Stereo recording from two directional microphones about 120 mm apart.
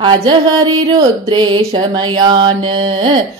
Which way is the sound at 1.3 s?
40° right (ahead or behind).